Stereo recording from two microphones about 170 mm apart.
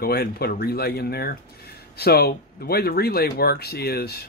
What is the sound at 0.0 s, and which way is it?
Speech, 65° left (ahead or behind).